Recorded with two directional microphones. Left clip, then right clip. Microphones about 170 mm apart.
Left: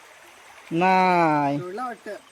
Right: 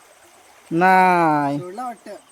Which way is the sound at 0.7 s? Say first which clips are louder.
Right 5 dB; 20° right (ahead or behind).